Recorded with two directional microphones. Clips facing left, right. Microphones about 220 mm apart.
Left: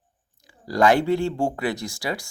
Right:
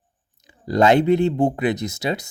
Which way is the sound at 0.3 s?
20° right (ahead or behind).